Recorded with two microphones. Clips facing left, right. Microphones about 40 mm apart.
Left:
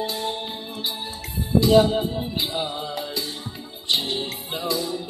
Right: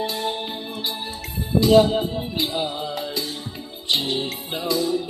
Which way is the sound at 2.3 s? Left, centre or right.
Centre.